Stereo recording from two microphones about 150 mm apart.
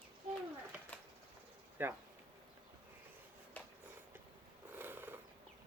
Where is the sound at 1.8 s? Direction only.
15° right (ahead or behind).